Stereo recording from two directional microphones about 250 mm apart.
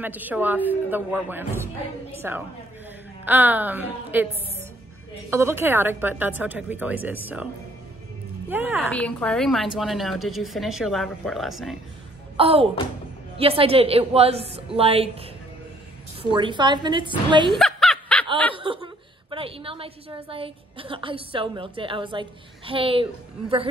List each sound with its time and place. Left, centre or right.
0.0 s a woman's voice: centre
5.3 s a woman's voice: centre
8.5 s a woman's voice: centre
8.9 s a woman's voice: centre
12.4 s a woman's voice: right
16.2 s a woman's voice: centre
17.5 s snicker: centre
18.5 s a woman's voice: right